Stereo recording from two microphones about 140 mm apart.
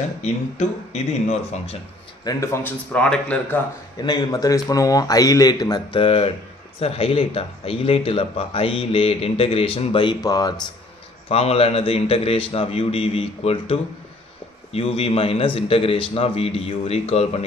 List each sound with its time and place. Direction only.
0.2 s a man's voice: 50° left (ahead or behind)
2.2 s speech: 20° left (ahead or behind)
4.0 s a man's voice: 30° left (ahead or behind)
11.2 s a man's voice: 45° left (ahead or behind)